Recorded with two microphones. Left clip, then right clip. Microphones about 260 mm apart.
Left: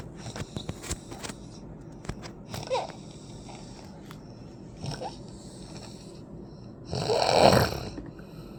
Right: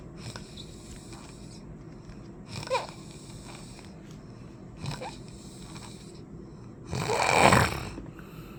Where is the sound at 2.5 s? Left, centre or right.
Centre.